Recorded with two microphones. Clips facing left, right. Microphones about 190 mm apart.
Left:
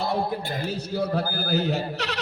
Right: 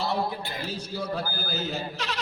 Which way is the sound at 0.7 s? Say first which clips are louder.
Left 6 dB; 60° left (ahead or behind).